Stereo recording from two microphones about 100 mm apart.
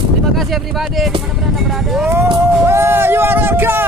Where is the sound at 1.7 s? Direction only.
5° right (ahead or behind).